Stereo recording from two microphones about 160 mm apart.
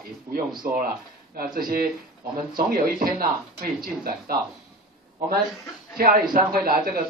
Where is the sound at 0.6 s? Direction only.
65° right (ahead or behind).